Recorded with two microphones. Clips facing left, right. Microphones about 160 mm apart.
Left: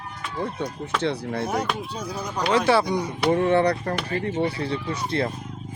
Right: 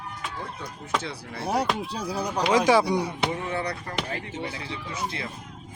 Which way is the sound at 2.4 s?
10° right (ahead or behind).